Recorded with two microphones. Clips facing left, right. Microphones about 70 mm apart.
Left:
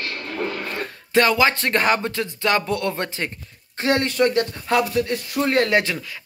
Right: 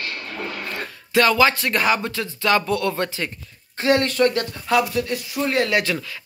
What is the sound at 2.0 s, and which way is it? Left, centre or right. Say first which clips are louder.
Speech: even; left.